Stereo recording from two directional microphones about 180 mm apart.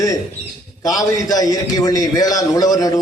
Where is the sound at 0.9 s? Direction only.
20° left (ahead or behind).